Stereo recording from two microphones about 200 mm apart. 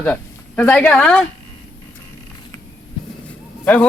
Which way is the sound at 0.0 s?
10° left (ahead or behind).